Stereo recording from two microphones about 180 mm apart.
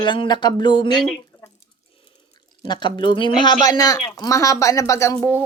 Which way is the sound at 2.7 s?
25° left (ahead or behind).